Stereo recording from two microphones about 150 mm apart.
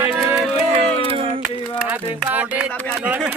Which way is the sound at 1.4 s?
10° right (ahead or behind).